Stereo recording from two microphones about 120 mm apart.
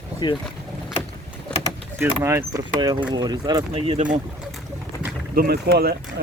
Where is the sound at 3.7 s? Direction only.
60° right (ahead or behind).